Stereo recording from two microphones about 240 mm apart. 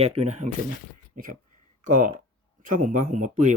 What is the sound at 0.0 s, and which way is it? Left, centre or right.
Speech, right.